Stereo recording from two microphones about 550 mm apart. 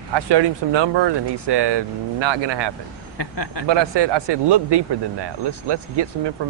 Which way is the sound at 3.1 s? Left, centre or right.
Left.